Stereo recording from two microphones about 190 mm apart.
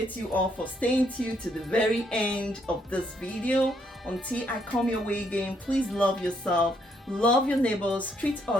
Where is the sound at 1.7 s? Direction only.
5° left (ahead or behind).